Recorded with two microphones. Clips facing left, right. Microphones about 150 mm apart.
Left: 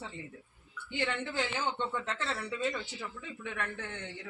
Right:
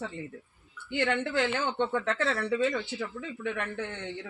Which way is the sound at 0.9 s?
60° right (ahead or behind).